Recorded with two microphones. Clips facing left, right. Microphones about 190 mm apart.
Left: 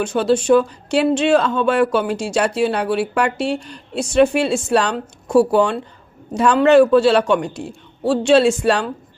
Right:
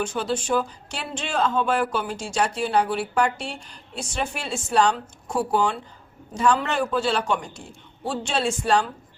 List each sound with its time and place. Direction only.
0.0 s speech: 75° left (ahead or behind)